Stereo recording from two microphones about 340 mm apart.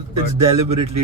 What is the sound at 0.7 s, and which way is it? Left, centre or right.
Speech, right.